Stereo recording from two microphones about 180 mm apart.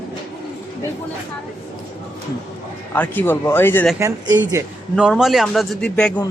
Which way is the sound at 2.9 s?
10° left (ahead or behind).